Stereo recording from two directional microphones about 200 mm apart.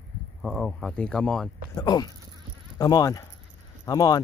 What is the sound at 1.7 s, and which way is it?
Speech, 20° left (ahead or behind).